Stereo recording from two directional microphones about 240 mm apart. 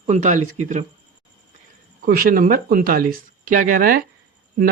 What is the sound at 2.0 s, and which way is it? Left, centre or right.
Speech, right.